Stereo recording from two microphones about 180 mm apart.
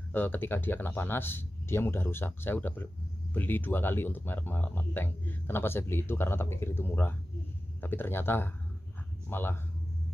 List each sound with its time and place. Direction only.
0.1 s speech: 10° left (ahead or behind)